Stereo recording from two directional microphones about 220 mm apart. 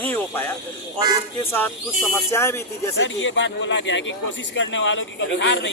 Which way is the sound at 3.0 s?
55° left (ahead or behind).